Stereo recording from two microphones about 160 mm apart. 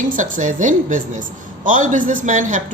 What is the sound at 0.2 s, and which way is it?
A woman's voice, 55° right (ahead or behind).